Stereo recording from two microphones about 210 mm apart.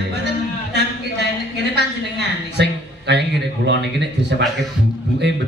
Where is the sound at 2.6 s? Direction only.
55° right (ahead or behind).